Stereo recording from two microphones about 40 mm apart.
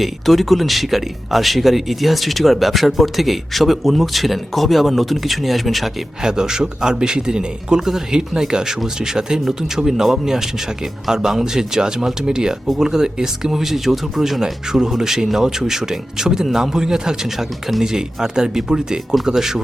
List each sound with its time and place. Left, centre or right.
0.0 s speech: centre
6.2 s speech: centre
7.8 s speech: centre